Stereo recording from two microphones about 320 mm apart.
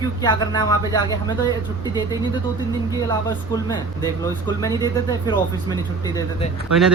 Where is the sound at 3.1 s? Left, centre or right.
Centre.